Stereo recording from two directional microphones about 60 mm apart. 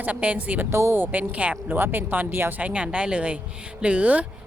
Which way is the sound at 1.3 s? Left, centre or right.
Right.